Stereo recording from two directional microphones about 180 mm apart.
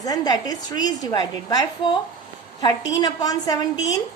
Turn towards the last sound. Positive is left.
turn(degrees=20)  # may be behind; listen again after turning